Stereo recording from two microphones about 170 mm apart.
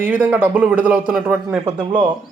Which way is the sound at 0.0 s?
10° right (ahead or behind).